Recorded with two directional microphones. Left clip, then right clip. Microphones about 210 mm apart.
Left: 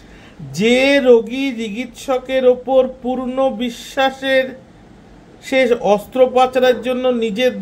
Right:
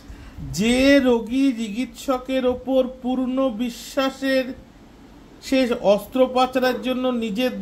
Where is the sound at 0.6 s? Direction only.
30° right (ahead or behind).